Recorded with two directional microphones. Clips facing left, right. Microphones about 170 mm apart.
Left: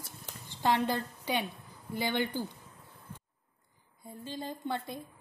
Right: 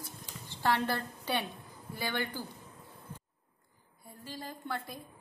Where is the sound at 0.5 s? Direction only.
15° left (ahead or behind).